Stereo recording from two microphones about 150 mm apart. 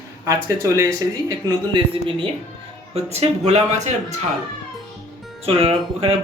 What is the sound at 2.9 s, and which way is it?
Speech, 45° right (ahead or behind).